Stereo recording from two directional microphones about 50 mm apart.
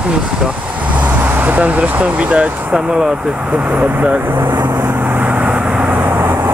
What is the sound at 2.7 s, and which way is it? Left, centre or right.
Speech, centre.